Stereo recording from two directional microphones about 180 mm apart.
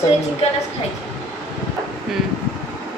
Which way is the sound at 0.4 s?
35° left (ahead or behind).